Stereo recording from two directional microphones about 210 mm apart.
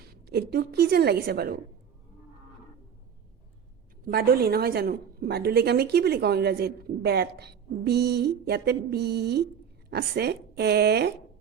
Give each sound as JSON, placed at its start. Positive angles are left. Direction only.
{"t": 0.0, "sound": "a woman's voice", "side_deg": -50}
{"t": 4.0, "sound": "a woman's voice", "side_deg": -45}